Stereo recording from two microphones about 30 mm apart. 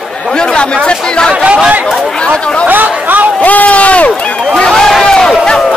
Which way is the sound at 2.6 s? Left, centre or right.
Right.